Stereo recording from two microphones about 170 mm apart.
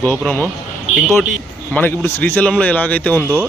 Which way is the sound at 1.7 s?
10° left (ahead or behind).